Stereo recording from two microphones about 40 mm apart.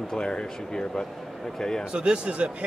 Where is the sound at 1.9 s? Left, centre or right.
Right.